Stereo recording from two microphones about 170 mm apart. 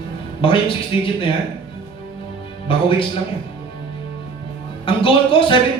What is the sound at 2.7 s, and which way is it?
Speech, 30° left (ahead or behind).